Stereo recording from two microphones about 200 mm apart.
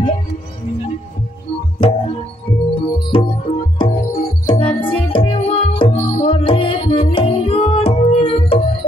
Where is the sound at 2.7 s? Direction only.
25° left (ahead or behind).